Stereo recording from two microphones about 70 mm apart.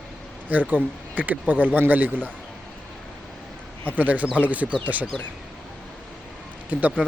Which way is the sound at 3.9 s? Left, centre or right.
Right.